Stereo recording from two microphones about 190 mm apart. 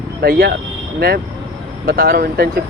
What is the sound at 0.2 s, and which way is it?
Speech, 55° right (ahead or behind).